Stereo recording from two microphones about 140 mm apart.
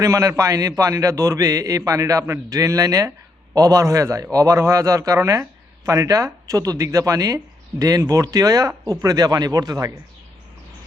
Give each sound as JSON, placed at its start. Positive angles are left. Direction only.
{"t": 0.0, "sound": "a man's voice", "side_deg": -20}